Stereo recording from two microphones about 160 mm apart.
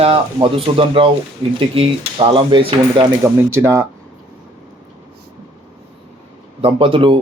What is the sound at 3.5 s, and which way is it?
Speech, 15° right (ahead or behind).